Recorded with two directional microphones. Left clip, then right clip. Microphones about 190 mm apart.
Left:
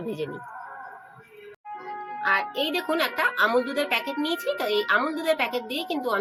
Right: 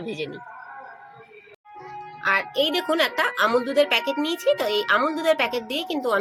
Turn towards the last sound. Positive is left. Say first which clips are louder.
# right 3 dB
turn(degrees=-30)  # may be behind; listen again after turning